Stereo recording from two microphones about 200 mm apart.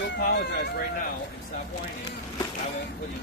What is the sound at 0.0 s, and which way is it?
Speech, 60° left (ahead or behind).